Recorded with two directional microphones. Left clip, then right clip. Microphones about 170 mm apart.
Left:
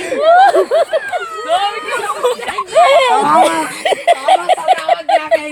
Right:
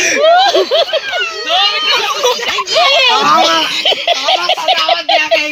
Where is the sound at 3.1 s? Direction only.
50° left (ahead or behind).